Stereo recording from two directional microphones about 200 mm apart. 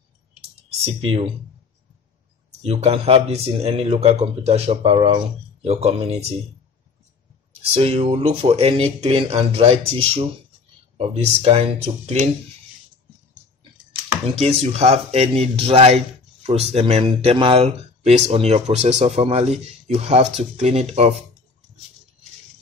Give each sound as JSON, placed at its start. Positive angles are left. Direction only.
{"t": 0.7, "sound": "speech", "side_deg": -30}
{"t": 2.6, "sound": "speech", "side_deg": -30}
{"t": 7.7, "sound": "speech", "side_deg": -30}
{"t": 14.2, "sound": "speech", "side_deg": -30}